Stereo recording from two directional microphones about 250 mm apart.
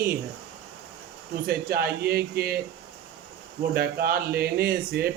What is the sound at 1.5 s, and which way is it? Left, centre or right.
Speech, right.